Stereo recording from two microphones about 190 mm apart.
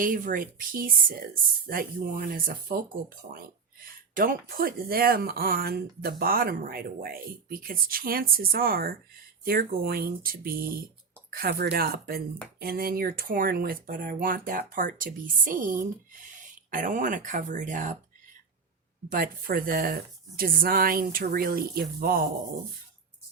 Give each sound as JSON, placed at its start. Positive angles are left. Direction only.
{"t": 0.0, "sound": "speech", "side_deg": -45}
{"t": 4.1, "sound": "speech", "side_deg": -50}
{"t": 19.1, "sound": "speech", "side_deg": -45}